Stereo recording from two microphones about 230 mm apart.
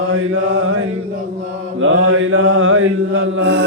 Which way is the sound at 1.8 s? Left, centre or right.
Right.